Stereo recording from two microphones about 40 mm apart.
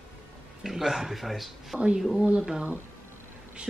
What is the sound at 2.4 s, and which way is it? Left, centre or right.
Speech, centre.